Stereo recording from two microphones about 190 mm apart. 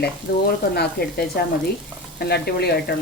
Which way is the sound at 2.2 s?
55° left (ahead or behind).